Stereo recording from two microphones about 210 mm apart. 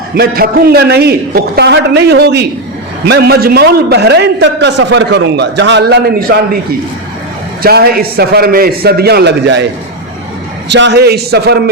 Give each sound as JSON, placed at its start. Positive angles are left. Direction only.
{"t": 0.1, "sound": "a man's voice", "side_deg": -45}
{"t": 7.6, "sound": "a man's voice", "side_deg": -45}
{"t": 10.7, "sound": "a man's voice", "side_deg": -55}